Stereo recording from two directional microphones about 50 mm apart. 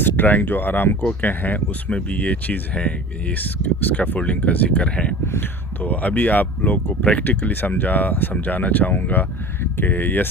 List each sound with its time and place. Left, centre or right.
0.0 s speech: left
1.9 s speech: left
3.3 s speech: left
4.8 s speech: left
5.2 s speech: left
5.8 s speech: left
7.3 s speech: left